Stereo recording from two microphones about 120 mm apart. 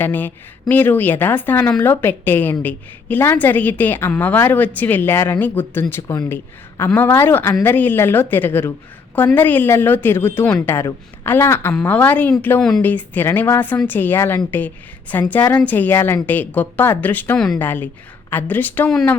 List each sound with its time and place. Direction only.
0.0 s a woman's voice: 15° left (ahead or behind)